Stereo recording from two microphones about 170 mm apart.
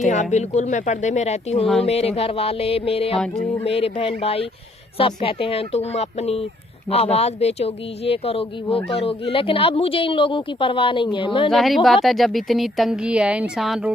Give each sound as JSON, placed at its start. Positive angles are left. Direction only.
{"t": 0.1, "sound": "speech", "side_deg": 45}
{"t": 3.2, "sound": "speech", "side_deg": 5}
{"t": 3.6, "sound": "speech", "side_deg": 35}
{"t": 11.5, "sound": "speech", "side_deg": 0}